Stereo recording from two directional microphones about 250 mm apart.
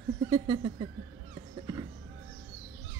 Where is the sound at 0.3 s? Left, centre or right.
Centre.